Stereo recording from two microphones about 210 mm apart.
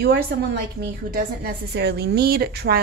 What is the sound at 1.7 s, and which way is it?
A woman's voice, 50° right (ahead or behind).